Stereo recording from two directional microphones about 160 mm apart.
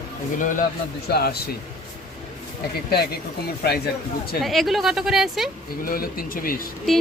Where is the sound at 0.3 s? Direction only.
55° left (ahead or behind).